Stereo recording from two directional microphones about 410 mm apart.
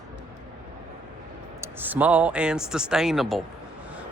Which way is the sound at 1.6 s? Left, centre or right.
Centre.